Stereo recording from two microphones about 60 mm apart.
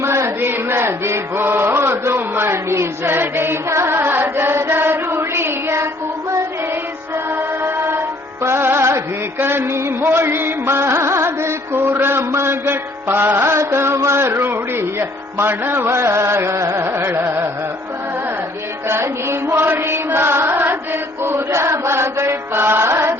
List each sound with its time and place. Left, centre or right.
0.0 s chant: right
7.9 s music: right
17.2 s carnatic music: right
18.9 s music: right